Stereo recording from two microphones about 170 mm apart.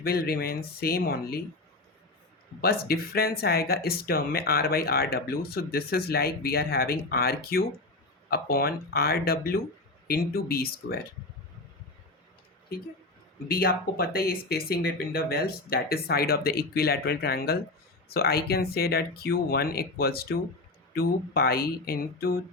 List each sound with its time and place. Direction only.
0.0 s speech: 65° left (ahead or behind)
2.6 s speech: 65° left (ahead or behind)
13.5 s speech: 65° left (ahead or behind)